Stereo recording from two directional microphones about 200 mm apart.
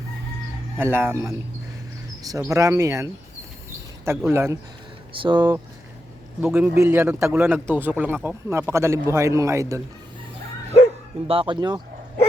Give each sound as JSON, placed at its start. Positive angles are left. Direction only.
{"t": 0.8, "sound": "a man's voice", "side_deg": -10}
{"t": 5.1, "sound": "speech", "side_deg": -25}
{"t": 6.4, "sound": "a man's voice", "side_deg": -10}
{"t": 11.3, "sound": "speech", "side_deg": -25}